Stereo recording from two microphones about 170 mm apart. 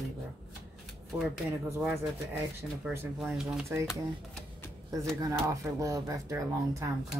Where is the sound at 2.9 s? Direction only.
5° right (ahead or behind).